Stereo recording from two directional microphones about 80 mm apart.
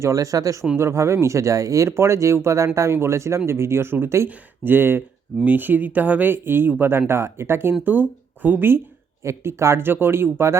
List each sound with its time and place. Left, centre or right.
0.0 s speech: right
0.8 s speech: right